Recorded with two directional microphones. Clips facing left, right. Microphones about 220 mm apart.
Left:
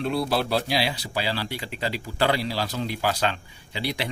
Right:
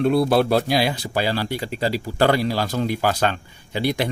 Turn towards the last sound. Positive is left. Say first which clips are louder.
# right 7 dB
turn(degrees=-50)  # may be behind; listen again after turning